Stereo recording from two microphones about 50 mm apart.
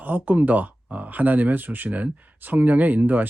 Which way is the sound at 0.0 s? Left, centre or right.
Right.